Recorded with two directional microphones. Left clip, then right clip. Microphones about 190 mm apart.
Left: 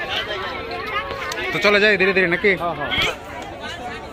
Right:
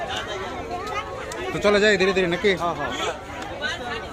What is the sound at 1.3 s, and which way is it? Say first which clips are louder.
Speech: left 3 dB; 5° right (ahead or behind).